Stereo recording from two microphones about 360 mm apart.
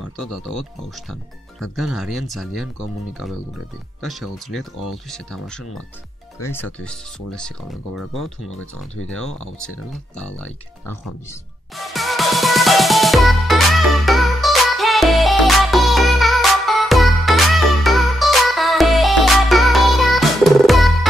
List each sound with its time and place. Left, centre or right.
1.6 s speech: centre
4.0 s speech: centre
8.5 s speech: left
10.1 s music: centre